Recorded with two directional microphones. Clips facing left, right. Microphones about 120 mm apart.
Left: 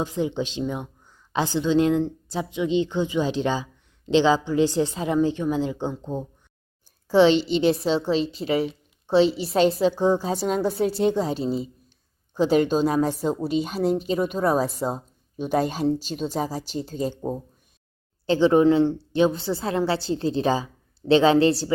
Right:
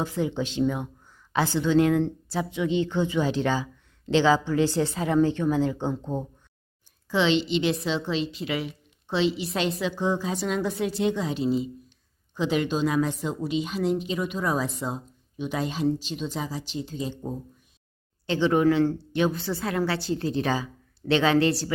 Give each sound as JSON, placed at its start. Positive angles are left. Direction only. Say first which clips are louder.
{"t": 0.0, "sound": "a woman's voice", "louder": "left 2 dB", "side_deg": 20}
{"t": 7.1, "sound": "a woman's voice", "louder": "left 6 dB", "side_deg": 40}
{"t": 18.3, "sound": "a woman's voice", "louder": "left 4 dB", "side_deg": 30}